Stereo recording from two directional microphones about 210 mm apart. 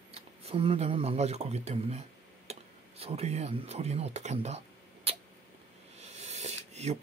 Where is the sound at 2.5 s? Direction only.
30° right (ahead or behind).